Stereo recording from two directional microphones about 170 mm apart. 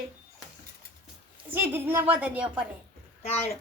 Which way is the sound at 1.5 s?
10° right (ahead or behind).